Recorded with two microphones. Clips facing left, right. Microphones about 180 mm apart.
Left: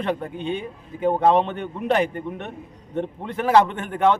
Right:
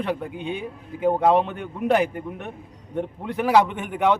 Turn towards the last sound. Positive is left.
turn(degrees=-15)  # may be behind; listen again after turning